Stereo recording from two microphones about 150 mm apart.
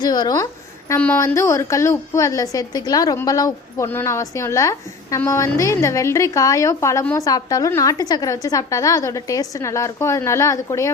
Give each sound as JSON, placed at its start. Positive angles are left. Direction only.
{"t": 0.0, "sound": "a woman's voice", "side_deg": 25}
{"t": 0.9, "sound": "a woman's voice", "side_deg": 15}